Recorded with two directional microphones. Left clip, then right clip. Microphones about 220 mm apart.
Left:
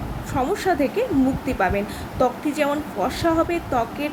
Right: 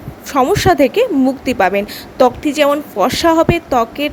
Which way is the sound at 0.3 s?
45° right (ahead or behind).